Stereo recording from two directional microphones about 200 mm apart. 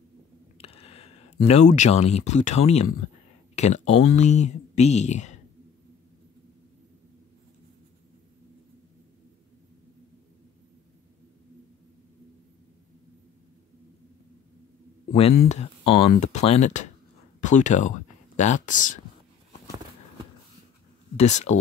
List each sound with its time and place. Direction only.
0.6 s speech: 30° left (ahead or behind)
15.1 s speech: 30° left (ahead or behind)
21.2 s speech: 35° left (ahead or behind)